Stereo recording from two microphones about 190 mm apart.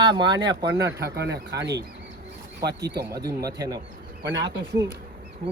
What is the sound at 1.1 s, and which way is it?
Speech, 60° right (ahead or behind).